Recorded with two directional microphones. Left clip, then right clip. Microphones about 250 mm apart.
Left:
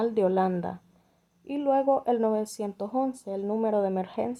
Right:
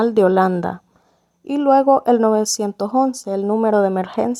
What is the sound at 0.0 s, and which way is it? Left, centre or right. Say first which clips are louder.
Speech: right 10 dB; right.